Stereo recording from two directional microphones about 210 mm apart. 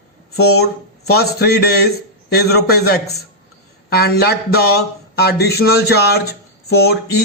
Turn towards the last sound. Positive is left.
turn(degrees=50)  # may be behind; listen again after turning